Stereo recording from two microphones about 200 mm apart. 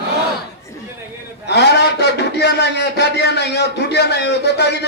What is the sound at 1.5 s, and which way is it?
A man's voice, 55° left (ahead or behind).